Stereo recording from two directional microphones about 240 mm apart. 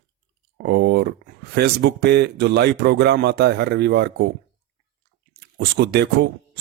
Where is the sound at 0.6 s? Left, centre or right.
Right.